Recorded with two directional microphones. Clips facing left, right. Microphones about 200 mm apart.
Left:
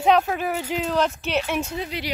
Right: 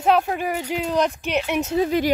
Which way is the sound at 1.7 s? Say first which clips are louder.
Right 10 dB; 45° right (ahead or behind).